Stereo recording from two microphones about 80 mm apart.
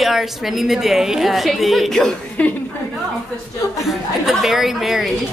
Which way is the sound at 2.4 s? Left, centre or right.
Centre.